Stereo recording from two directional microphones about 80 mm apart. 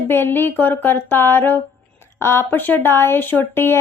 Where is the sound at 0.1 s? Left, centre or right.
Left.